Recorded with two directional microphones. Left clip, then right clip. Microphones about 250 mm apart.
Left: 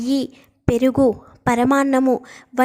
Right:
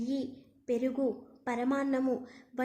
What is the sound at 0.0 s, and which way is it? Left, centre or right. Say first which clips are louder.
A woman's voice: left 14 dB; left.